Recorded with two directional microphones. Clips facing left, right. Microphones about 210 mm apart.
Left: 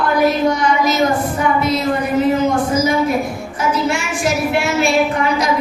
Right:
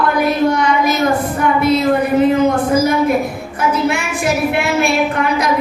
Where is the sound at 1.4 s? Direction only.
60° right (ahead or behind).